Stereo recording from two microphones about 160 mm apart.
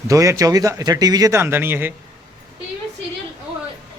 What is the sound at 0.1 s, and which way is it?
Speech, 20° right (ahead or behind).